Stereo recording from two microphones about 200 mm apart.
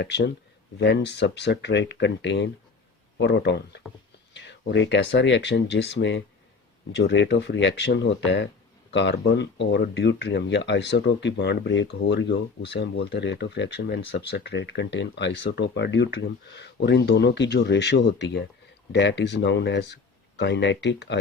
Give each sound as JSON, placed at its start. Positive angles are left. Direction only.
{"t": 0.0, "sound": "speech", "side_deg": 60}